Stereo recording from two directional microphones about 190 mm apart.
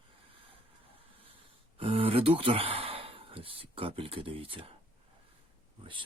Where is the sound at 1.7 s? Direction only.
30° right (ahead or behind).